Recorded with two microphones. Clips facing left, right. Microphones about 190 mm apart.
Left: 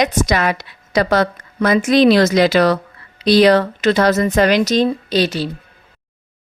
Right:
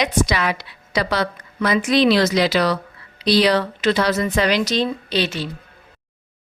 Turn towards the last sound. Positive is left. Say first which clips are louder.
# left 5 dB
turn(degrees=35)  # may be behind; listen again after turning